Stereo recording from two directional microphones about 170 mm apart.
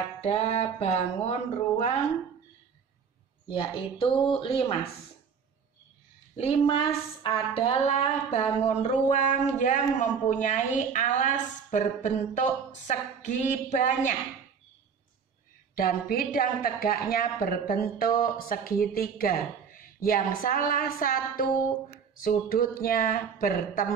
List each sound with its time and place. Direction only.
0.2 s speech: 40° left (ahead or behind)
3.4 s speech: 30° left (ahead or behind)
6.3 s a woman's voice: 35° left (ahead or behind)
15.7 s speech: 60° left (ahead or behind)